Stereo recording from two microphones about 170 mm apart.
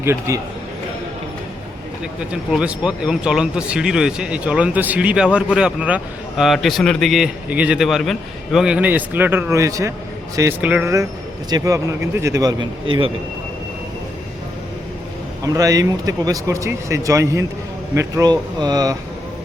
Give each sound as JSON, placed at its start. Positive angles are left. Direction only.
{"t": 0.0, "sound": "speech", "side_deg": -15}
{"t": 2.3, "sound": "speech", "side_deg": -5}
{"t": 15.5, "sound": "speech", "side_deg": -20}